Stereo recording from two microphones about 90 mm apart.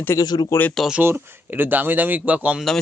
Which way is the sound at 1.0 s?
25° right (ahead or behind).